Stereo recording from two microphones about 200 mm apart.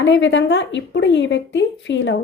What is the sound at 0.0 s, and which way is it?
A woman's voice, 65° left (ahead or behind).